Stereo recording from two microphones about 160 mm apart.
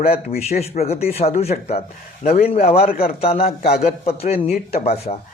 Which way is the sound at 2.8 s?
70° left (ahead or behind).